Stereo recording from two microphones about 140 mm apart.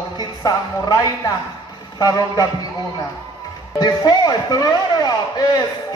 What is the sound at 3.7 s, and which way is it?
Speech, 30° left (ahead or behind).